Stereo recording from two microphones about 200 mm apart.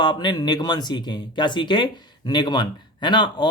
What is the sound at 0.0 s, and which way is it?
Speech, 25° left (ahead or behind).